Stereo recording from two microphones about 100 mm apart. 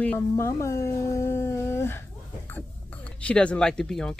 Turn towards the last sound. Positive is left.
turn(degrees=5)  # may be behind; listen again after turning